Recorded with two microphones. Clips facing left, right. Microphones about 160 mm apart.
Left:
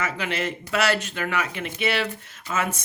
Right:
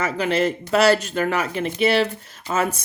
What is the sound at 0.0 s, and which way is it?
Speech, 35° right (ahead or behind).